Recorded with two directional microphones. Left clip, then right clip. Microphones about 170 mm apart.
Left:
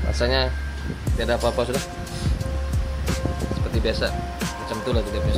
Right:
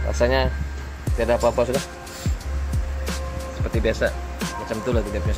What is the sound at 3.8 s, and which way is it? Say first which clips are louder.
Music: right 3 dB; centre (ahead or behind).